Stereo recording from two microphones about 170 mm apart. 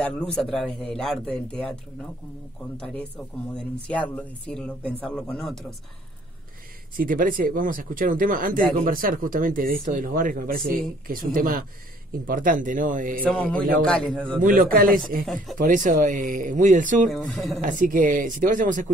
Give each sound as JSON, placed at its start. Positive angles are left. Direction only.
{"t": 0.0, "sound": "speech", "side_deg": 5}
{"t": 2.8, "sound": "a man's voice", "side_deg": 5}
{"t": 7.0, "sound": "speech", "side_deg": -55}
{"t": 13.2, "sound": "a man's voice", "side_deg": 5}
{"t": 14.4, "sound": "speech", "side_deg": -55}
{"t": 17.1, "sound": "speech", "side_deg": 5}
{"t": 17.6, "sound": "speech", "side_deg": -50}